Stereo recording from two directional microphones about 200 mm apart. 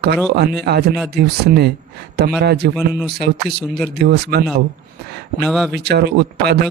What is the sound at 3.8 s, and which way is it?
Speech, 55° right (ahead or behind).